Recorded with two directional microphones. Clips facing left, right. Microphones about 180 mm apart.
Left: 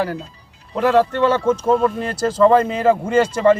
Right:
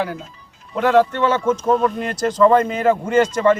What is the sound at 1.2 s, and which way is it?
Speech, 35° left (ahead or behind).